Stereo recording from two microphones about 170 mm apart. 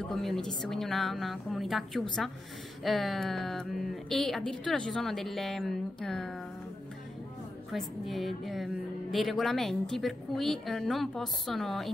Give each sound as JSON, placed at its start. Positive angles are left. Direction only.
{"t": 0.0, "sound": "speech", "side_deg": 0}
{"t": 7.7, "sound": "speech", "side_deg": 0}